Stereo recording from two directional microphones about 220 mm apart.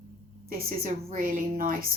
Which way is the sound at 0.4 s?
45° right (ahead or behind).